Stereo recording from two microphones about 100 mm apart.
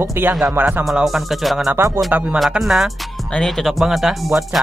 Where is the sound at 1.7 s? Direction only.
30° right (ahead or behind).